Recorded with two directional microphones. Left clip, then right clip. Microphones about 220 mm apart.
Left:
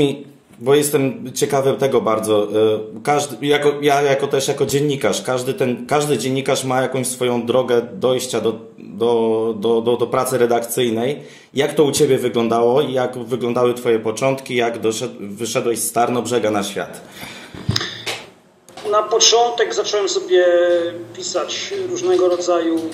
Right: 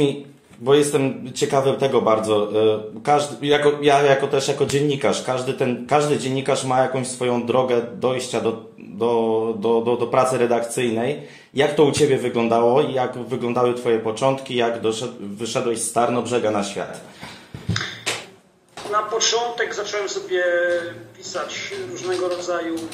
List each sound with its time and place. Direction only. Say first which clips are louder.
0.7 s a man's voice: left 2 dB; 25° left (ahead or behind)
19.1 s a man's voice: left 7 dB; 45° left (ahead or behind)